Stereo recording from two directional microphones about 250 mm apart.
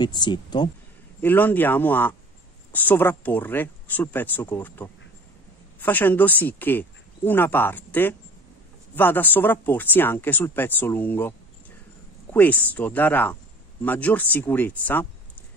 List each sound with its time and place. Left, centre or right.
0.0 s speech: centre